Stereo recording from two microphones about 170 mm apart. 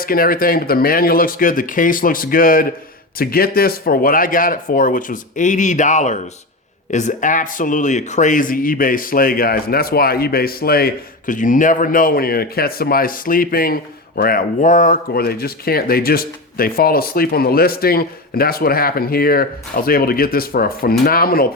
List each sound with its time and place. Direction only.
0.0 s speech: 60° left (ahead or behind)